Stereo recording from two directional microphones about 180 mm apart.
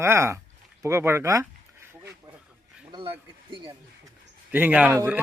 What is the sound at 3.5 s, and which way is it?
Speech, 25° right (ahead or behind).